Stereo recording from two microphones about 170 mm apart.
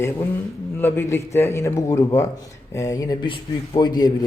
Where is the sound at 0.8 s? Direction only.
15° left (ahead or behind).